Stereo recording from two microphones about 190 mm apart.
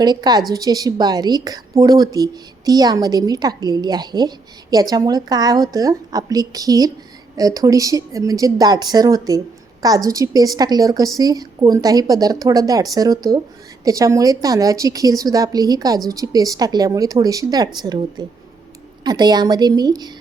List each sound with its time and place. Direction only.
0.0 s a woman's voice: 20° right (ahead or behind)